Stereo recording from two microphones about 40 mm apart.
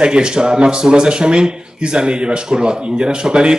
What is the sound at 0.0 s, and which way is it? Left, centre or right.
Speech, right.